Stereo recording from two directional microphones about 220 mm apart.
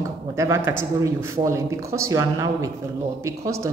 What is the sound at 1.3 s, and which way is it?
A woman's voice, 15° right (ahead or behind).